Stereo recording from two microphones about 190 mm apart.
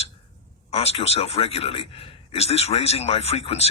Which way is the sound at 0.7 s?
30° left (ahead or behind).